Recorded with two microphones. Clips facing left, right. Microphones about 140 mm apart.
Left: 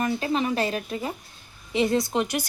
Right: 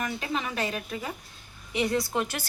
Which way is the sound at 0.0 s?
35° left (ahead or behind).